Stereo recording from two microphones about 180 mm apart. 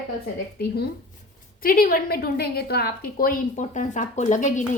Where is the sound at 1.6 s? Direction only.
55° left (ahead or behind).